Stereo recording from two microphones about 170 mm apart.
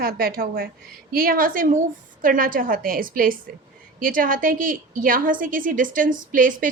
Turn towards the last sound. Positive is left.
turn(degrees=-55)  # may be behind; listen again after turning